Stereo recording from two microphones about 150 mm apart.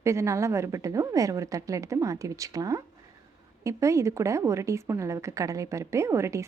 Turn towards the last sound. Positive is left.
turn(degrees=-20)  # may be behind; listen again after turning